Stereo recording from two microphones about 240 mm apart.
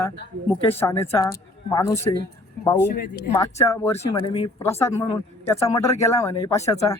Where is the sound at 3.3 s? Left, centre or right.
Centre.